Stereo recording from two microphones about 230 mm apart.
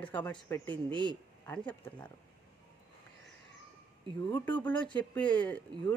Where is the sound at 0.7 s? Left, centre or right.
Right.